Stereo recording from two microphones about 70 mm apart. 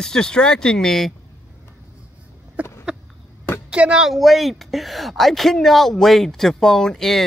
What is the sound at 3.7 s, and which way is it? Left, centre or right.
Speech, centre.